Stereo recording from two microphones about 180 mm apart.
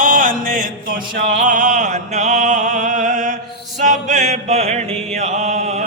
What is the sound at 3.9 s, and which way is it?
Chant, 40° right (ahead or behind).